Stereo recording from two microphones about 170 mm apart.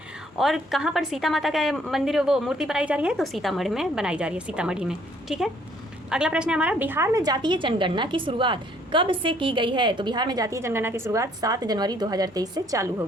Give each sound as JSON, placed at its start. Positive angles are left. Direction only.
{"t": 0.3, "sound": "a woman's voice", "side_deg": 0}